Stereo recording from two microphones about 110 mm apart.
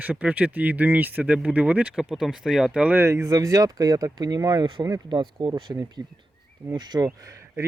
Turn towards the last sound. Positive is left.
turn(degrees=-25)  # may be behind; listen again after turning